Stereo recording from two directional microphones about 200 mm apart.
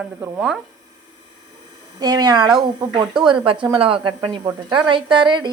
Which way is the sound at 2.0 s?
20° right (ahead or behind).